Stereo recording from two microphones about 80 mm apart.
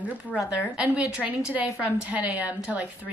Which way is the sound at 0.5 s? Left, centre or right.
Centre.